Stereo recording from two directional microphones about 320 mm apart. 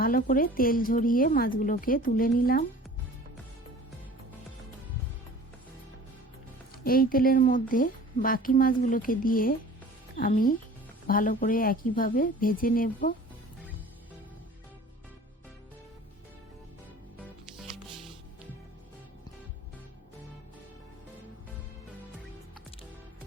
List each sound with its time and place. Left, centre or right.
0.0 s speech: left
6.8 s speech: left